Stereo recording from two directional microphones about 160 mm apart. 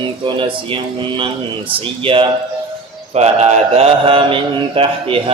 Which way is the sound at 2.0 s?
35° right (ahead or behind).